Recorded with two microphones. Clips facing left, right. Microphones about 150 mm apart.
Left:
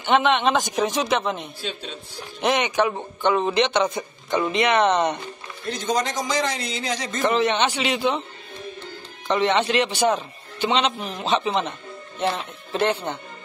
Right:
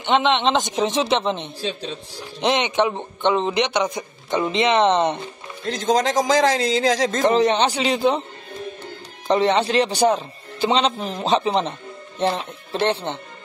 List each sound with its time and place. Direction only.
0.0 s a man's voice: 20° right (ahead or behind)
2.4 s a man's voice: 20° right (ahead or behind)
5.7 s a man's voice: 90° right
7.2 s a man's voice: 35° right (ahead or behind)
9.3 s a man's voice: 35° right (ahead or behind)